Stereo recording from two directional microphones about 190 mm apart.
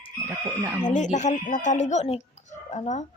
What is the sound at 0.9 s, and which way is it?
Speech, 40° left (ahead or behind).